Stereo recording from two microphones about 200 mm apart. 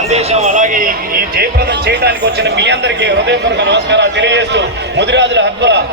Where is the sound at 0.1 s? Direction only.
30° right (ahead or behind).